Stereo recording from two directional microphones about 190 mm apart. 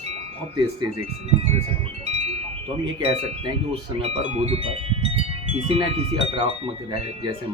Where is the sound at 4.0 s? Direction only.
30° right (ahead or behind).